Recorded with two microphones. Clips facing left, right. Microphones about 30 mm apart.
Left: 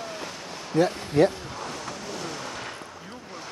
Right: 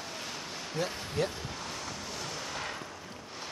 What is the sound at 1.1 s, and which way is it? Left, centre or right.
Speech, left.